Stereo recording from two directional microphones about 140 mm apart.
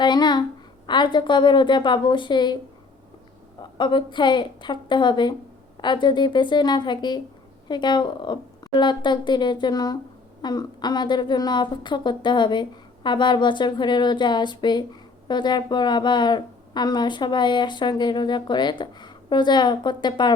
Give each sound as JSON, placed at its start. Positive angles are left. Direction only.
{"t": 0.0, "sound": "a sound", "side_deg": 30}
{"t": 0.9, "sound": "a woman's voice", "side_deg": 35}
{"t": 3.6, "sound": "a woman's voice", "side_deg": 35}